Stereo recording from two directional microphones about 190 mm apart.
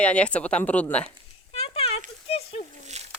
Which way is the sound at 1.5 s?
30° left (ahead or behind).